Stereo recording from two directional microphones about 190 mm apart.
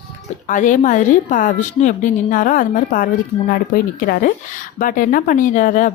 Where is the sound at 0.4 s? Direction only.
40° left (ahead or behind).